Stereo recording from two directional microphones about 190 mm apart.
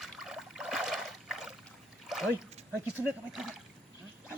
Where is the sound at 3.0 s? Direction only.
5° right (ahead or behind).